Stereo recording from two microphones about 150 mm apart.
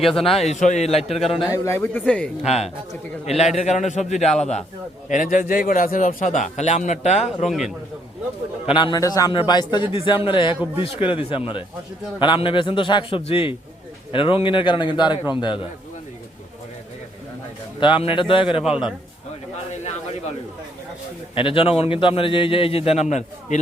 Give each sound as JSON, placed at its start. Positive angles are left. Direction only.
{"t": 0.0, "sound": "a man's voice", "side_deg": 0}
{"t": 0.4, "sound": "a man's voice", "side_deg": 55}
{"t": 1.2, "sound": "a man's voice", "side_deg": 0}
{"t": 1.5, "sound": "a man's voice", "side_deg": 20}
{"t": 2.4, "sound": "a man's voice", "side_deg": 45}
{"t": 5.0, "sound": "a man's voice", "side_deg": 60}
{"t": 7.4, "sound": "a man's voice", "side_deg": 0}
{"t": 8.6, "sound": "a man's voice", "side_deg": 30}
{"t": 17.7, "sound": "a man's voice", "side_deg": 35}
{"t": 21.3, "sound": "a man's voice", "side_deg": 35}